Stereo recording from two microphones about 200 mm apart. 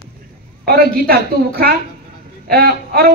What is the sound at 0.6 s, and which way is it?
A woman's voice, 50° right (ahead or behind).